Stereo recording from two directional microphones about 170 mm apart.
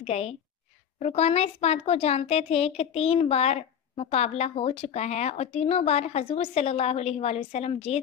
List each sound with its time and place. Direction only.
0.0 s speech: 35° left (ahead or behind)